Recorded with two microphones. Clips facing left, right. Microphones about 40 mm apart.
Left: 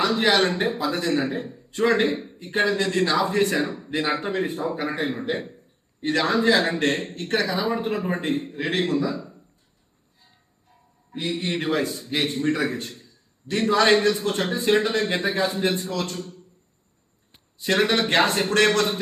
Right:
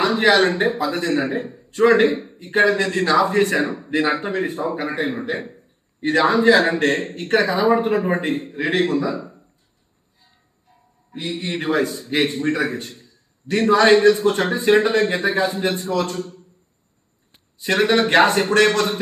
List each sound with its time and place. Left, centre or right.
0.0 s speech: centre
0.3 s a man's voice: centre
10.2 s music: centre
12.1 s a man's voice: centre
13.5 s a man's voice: right
13.7 s a man's voice: centre
17.6 s a man's voice: centre
18.5 s a man's voice: centre